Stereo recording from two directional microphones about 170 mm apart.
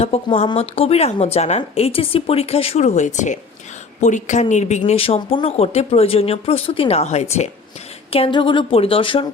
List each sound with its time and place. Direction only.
0.0 s speech: 35° left (ahead or behind)
8.1 s speech: 30° left (ahead or behind)